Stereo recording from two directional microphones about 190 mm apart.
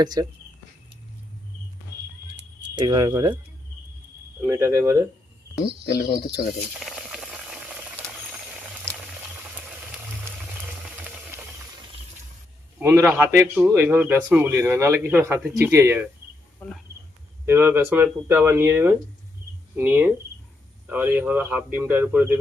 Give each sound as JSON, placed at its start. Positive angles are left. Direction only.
{"t": 0.0, "sound": "speech", "side_deg": -20}
{"t": 2.7, "sound": "speech", "side_deg": -25}
{"t": 4.4, "sound": "speech", "side_deg": -15}
{"t": 5.8, "sound": "speech", "side_deg": 55}
{"t": 6.7, "sound": "boiling", "side_deg": 0}
{"t": 10.8, "sound": "a sound", "side_deg": -10}
{"t": 12.8, "sound": "speech", "side_deg": -10}
{"t": 16.6, "sound": "speech", "side_deg": 10}
{"t": 17.4, "sound": "speech", "side_deg": -10}